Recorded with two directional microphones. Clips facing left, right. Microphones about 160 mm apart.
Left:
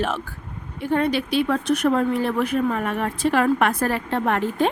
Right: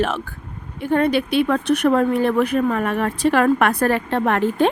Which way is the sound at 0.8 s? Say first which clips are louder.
Right 3 dB; 55° right (ahead or behind).